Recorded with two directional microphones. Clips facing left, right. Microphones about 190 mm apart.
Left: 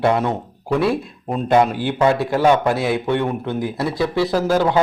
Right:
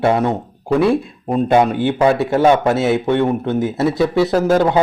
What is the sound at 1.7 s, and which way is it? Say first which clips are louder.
Speech: right 3 dB; 20° right (ahead or behind).